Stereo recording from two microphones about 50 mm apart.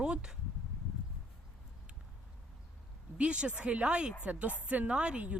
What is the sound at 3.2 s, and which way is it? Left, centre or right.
Speech, right.